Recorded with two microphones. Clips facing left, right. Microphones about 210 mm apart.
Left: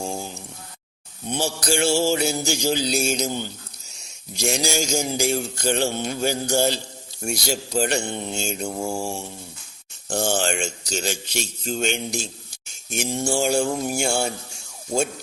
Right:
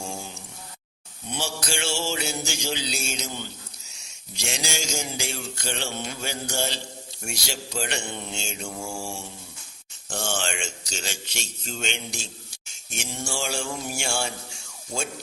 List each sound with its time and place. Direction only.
1.4 s mantra: 45° left (ahead or behind)